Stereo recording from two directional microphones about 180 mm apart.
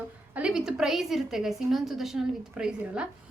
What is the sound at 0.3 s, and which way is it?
A woman's voice, 5° right (ahead or behind).